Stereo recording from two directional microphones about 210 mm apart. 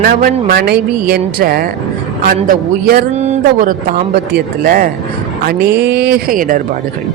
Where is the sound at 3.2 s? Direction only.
35° right (ahead or behind).